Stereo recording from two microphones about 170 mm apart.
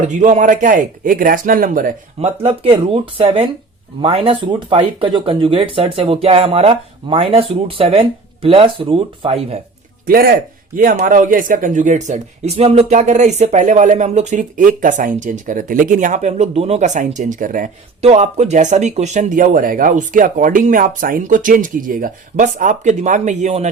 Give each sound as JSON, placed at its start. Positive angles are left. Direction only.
{"t": 0.0, "sound": "speech", "side_deg": -45}
{"t": 2.2, "sound": "speech", "side_deg": -35}
{"t": 10.1, "sound": "speech", "side_deg": -60}